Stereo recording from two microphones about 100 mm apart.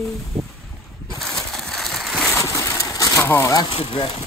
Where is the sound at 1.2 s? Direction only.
5° left (ahead or behind).